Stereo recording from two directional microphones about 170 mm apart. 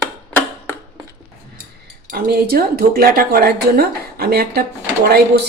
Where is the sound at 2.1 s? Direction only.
60° right (ahead or behind).